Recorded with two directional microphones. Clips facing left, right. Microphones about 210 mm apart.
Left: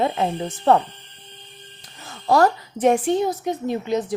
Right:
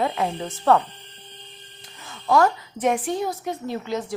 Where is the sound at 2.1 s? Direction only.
35° left (ahead or behind).